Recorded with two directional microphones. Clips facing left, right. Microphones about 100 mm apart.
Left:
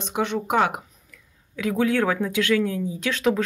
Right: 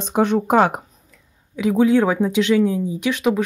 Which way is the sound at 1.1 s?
20° right (ahead or behind).